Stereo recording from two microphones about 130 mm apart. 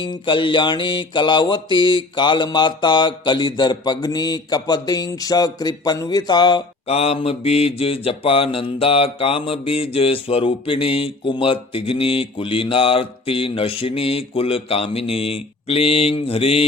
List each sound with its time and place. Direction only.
0.0 s mantra: 40° left (ahead or behind)
6.8 s mantra: 50° left (ahead or behind)